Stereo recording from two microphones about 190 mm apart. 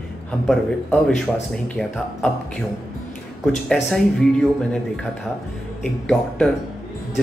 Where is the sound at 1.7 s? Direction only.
Centre (ahead or behind).